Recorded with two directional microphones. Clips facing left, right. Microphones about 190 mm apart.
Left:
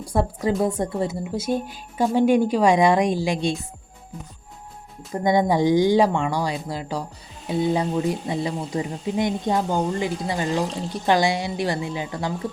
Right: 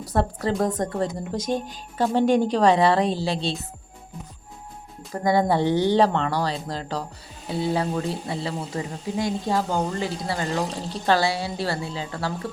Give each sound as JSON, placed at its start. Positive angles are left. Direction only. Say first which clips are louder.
{"t": 0.0, "sound": "speech", "louder": "left 1 dB", "side_deg": 10}
{"t": 5.2, "sound": "speech", "louder": "left 2 dB", "side_deg": 20}